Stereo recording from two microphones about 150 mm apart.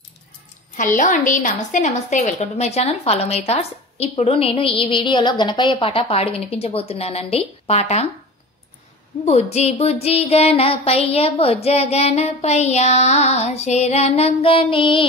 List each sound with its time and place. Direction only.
0.9 s a woman's voice: 60° left (ahead or behind); by 8.1 s 45° left (ahead or behind)
9.2 s a woman's voice: 45° left (ahead or behind)